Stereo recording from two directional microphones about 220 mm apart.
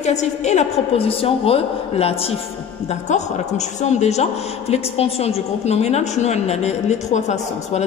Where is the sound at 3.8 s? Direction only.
30° left (ahead or behind).